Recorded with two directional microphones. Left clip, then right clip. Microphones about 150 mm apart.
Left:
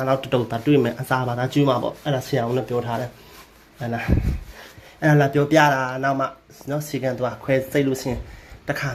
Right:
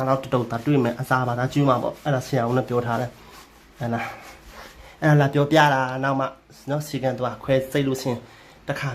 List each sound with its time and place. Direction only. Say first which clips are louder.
0.0 s speech: left 1 dB; centre (ahead or behind)
2.5 s speech: right 1 dB; 15° right (ahead or behind)
8.6 s a sound: left 2 dB; 5° left (ahead or behind)